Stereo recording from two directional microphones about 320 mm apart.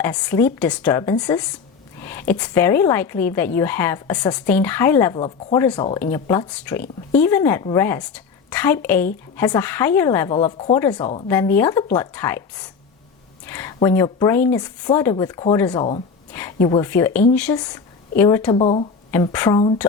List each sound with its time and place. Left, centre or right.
0.0 s speech: centre
5.2 s a woman's voice: centre